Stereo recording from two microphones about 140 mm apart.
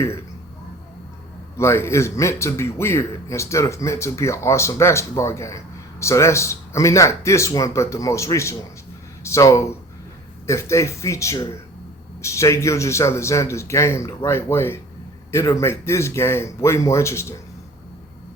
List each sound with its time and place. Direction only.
1.5 s a man's voice: 20° left (ahead or behind)